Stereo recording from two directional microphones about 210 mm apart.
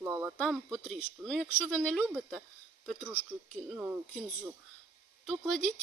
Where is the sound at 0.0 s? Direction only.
10° right (ahead or behind).